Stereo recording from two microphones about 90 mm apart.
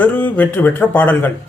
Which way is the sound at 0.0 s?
20° left (ahead or behind).